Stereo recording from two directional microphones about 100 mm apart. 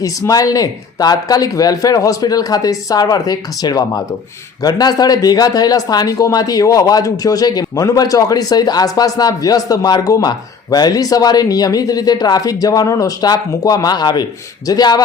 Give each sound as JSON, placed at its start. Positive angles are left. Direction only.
{"t": 0.0, "sound": "speech", "side_deg": 35}